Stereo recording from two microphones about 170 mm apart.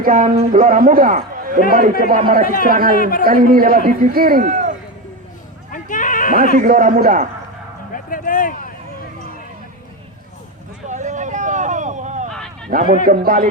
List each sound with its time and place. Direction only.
0.0 s a man's voice: 55° right (ahead or behind)
3.0 s a man's voice: 55° left (ahead or behind)
3.2 s a man's voice: 55° right (ahead or behind)
5.7 s sheep: 50° left (ahead or behind)
6.6 s speech: 50° right (ahead or behind)
7.9 s a sound: 55° left (ahead or behind)
10.8 s a sound: 45° right (ahead or behind)
12.7 s a man's voice: 55° right (ahead or behind)